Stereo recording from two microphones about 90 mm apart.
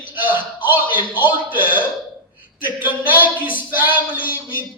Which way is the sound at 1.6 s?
20° right (ahead or behind).